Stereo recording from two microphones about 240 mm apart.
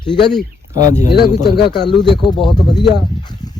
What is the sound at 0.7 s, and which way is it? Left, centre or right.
Speech, left.